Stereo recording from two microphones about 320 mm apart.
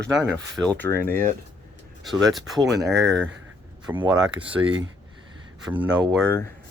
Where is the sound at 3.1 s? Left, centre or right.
Right.